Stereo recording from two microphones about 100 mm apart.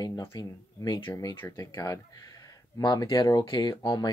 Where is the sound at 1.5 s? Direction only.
35° left (ahead or behind).